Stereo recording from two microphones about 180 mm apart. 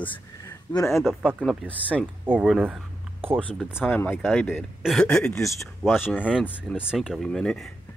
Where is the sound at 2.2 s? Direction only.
10° right (ahead or behind).